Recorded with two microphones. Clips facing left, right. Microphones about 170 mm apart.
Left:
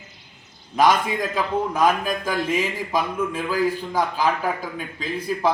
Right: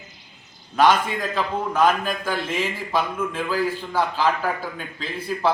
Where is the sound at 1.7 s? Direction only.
10° left (ahead or behind).